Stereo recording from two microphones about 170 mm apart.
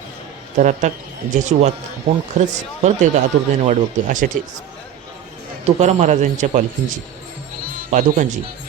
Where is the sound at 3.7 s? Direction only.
50° right (ahead or behind).